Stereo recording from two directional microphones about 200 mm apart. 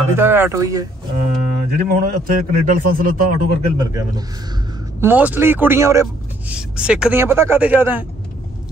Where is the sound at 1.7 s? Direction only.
50° right (ahead or behind).